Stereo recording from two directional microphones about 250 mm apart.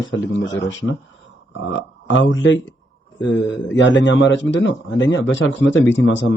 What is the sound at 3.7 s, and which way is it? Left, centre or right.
A man's voice, left.